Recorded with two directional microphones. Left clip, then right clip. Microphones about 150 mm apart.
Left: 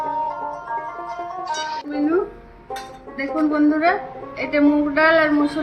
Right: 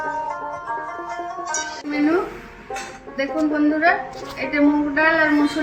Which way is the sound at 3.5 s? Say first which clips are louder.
Even; 15° right (ahead or behind).